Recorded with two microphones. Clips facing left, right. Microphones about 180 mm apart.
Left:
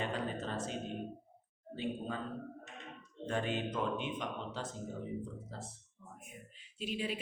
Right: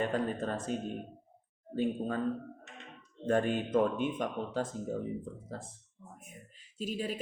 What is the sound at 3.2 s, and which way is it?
A woman's voice, 50° right (ahead or behind).